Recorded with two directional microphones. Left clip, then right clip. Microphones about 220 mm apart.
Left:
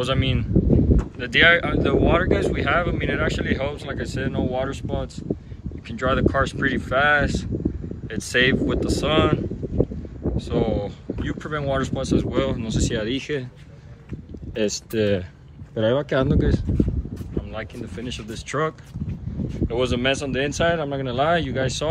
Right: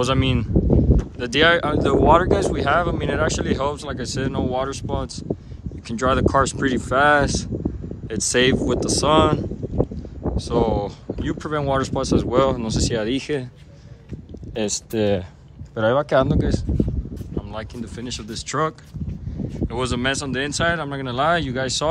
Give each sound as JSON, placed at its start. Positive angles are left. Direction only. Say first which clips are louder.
{"t": 0.0, "sound": "speech", "louder": "right 3 dB", "side_deg": -10}
{"t": 14.5, "sound": "speech", "louder": "even", "side_deg": 0}